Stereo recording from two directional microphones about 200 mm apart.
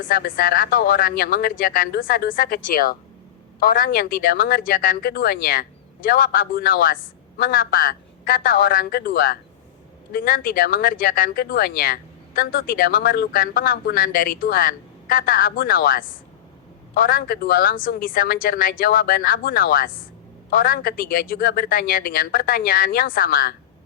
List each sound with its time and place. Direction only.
0.1 s speech: 45° left (ahead or behind)